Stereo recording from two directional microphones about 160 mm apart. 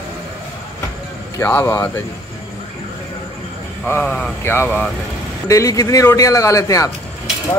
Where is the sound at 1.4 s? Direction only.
15° left (ahead or behind).